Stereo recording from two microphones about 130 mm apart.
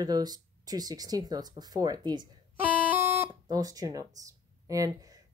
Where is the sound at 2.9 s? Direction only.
15° right (ahead or behind).